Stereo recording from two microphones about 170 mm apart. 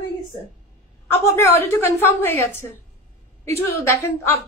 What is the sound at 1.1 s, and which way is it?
A woman's voice, 15° left (ahead or behind).